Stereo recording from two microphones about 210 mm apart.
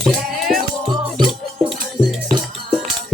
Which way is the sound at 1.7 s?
Centre (ahead or behind).